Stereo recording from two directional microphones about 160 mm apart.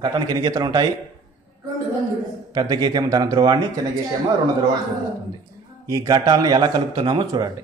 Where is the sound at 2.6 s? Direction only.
25° right (ahead or behind).